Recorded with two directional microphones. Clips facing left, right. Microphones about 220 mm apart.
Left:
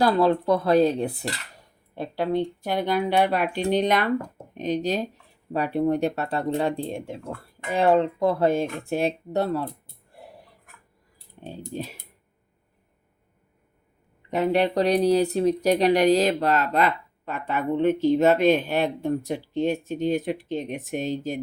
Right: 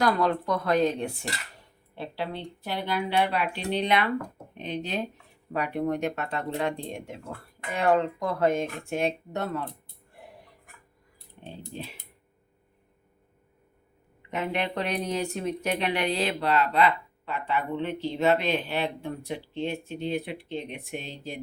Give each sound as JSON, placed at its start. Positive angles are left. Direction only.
{"t": 0.0, "sound": "speech", "side_deg": 30}
{"t": 2.0, "sound": "speech", "side_deg": 45}
{"t": 11.4, "sound": "speech", "side_deg": 45}
{"t": 14.2, "sound": "speech", "side_deg": 40}